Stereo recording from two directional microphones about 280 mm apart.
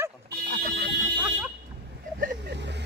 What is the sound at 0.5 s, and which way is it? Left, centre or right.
Alarm, right.